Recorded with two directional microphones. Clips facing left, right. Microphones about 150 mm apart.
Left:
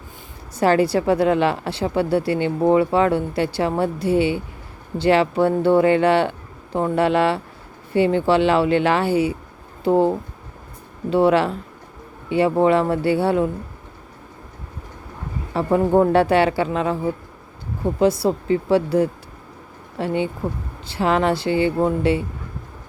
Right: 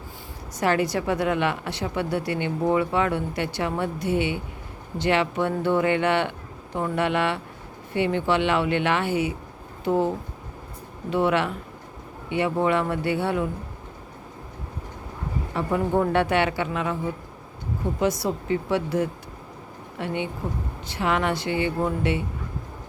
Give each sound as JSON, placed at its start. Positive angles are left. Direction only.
{"t": 0.6, "sound": "a woman's voice", "side_deg": 30}
{"t": 15.5, "sound": "a woman's voice", "side_deg": 35}
{"t": 18.0, "sound": "a woman's voice", "side_deg": 30}